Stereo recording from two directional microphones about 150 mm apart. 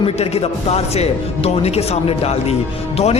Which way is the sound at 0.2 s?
45° left (ahead or behind).